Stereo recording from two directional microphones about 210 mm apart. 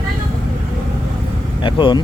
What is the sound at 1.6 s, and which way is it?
Speech, 20° left (ahead or behind).